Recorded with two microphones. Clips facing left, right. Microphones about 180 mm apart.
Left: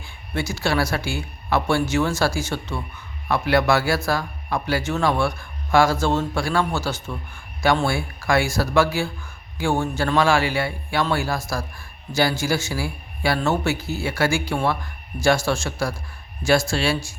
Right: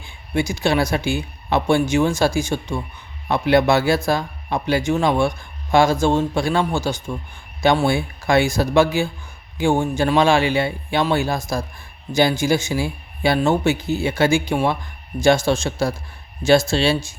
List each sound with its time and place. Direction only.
0.0 s a man's voice: 15° right (ahead or behind)